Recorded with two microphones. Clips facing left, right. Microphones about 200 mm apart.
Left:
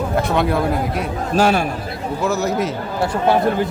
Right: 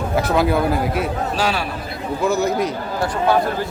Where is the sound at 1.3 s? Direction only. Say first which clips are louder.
Left 8 dB; 50° left (ahead or behind).